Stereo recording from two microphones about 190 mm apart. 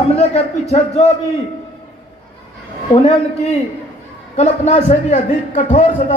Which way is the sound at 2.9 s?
35° left (ahead or behind).